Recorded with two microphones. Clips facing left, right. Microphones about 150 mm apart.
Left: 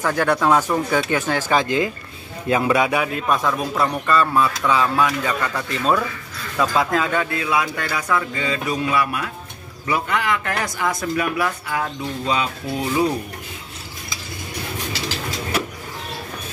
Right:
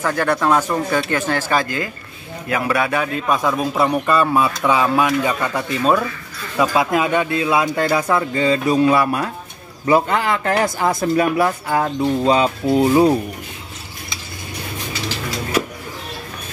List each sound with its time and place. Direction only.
0.0 s speech: 10° left (ahead or behind); by 12.9 s 35° right (ahead or behind)